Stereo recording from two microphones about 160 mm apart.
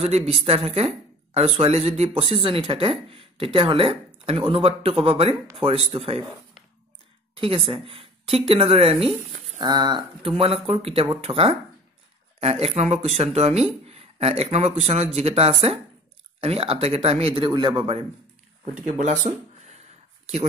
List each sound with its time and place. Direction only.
0.3 s a woman's voice: 35° right (ahead or behind)
7.3 s a woman's voice: 35° right (ahead or behind)
18.9 s a sound: 45° right (ahead or behind)